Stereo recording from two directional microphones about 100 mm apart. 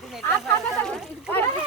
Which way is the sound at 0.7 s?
5° left (ahead or behind).